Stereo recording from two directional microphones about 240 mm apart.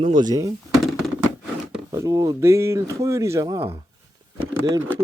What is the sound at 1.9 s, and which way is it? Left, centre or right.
Speech, centre.